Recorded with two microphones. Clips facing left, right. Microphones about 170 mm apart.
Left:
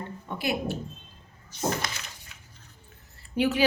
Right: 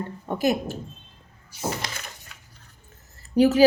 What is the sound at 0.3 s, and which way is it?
Speech, 45° right (ahead or behind).